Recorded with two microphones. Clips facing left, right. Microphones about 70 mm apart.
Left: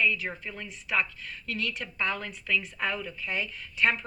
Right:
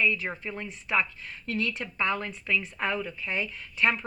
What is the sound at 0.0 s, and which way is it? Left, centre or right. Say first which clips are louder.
A woman's voice: right 1 dB; right.